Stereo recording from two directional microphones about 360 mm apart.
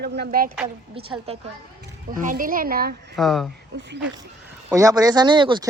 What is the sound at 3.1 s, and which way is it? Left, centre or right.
Speech, centre.